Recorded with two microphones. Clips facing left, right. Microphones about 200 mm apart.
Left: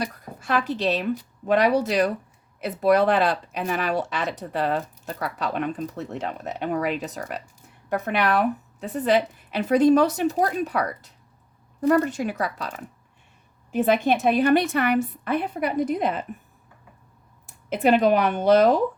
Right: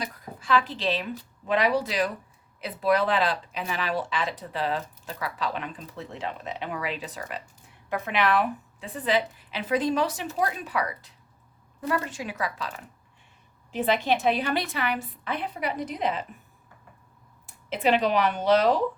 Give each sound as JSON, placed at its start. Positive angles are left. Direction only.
{"t": 0.3, "sound": "a woman's voice", "side_deg": 45}
{"t": 17.7, "sound": "speech", "side_deg": 50}